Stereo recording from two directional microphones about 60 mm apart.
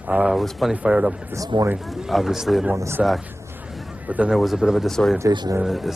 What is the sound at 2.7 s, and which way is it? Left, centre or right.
Speech, right.